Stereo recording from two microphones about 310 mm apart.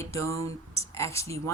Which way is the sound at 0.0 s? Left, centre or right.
Centre.